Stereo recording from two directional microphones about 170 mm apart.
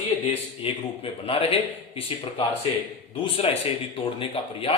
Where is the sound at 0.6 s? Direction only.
35° left (ahead or behind).